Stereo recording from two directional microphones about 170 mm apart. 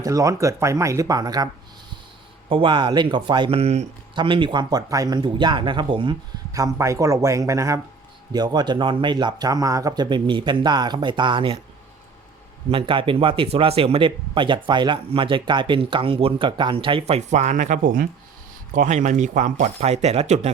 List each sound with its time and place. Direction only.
0.0 s speech: 20° right (ahead or behind)
2.5 s speech: 30° right (ahead or behind)
4.2 s speech: 30° right (ahead or behind)
12.7 s speech: 30° right (ahead or behind)